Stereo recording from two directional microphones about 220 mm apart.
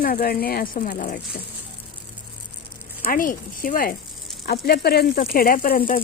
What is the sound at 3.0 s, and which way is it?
Speech, 40° left (ahead or behind).